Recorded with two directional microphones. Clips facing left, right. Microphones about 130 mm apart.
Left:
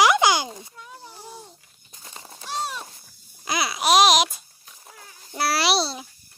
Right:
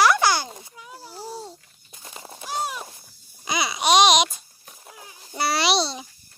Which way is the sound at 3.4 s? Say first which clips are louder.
Even; centre (ahead or behind).